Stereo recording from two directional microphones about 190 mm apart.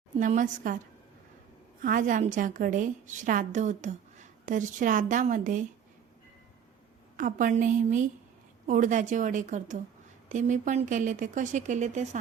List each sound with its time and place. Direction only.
0.2 s a woman's voice: 45° right (ahead or behind)
1.8 s a woman's voice: 45° right (ahead or behind)
7.2 s a woman's voice: 45° right (ahead or behind)